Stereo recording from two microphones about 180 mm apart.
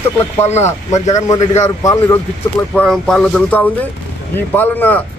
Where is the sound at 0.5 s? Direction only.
40° left (ahead or behind).